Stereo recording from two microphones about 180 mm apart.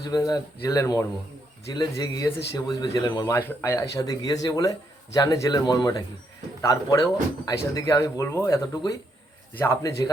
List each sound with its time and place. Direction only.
0.1 s speech: 20° left (ahead or behind)